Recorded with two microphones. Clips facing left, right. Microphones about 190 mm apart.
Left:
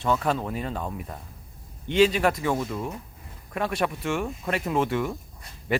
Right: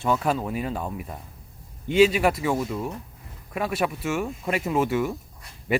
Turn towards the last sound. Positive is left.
turn(degrees=-10)  # may be behind; listen again after turning